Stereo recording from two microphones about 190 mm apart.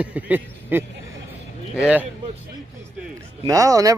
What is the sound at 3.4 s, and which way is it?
Speech, 15° right (ahead or behind).